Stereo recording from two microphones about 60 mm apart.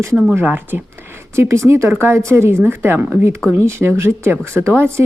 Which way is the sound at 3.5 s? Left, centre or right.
Right.